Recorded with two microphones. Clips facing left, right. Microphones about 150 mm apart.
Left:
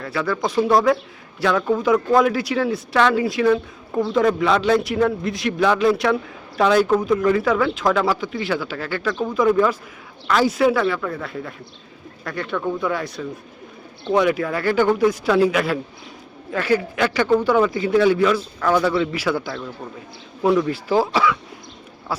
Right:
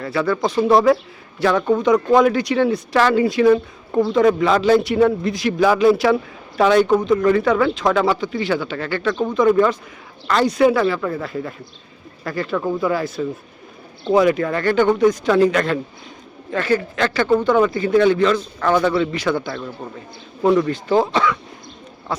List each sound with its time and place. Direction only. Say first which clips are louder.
0.0 s a man's voice: right 3 dB; centre (ahead or behind)